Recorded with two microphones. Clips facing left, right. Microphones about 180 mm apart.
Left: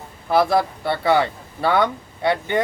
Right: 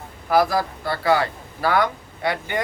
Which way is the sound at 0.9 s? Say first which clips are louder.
Even; 25° left (ahead or behind).